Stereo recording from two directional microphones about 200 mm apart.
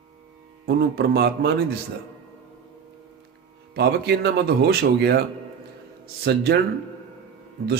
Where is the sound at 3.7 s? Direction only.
55° right (ahead or behind).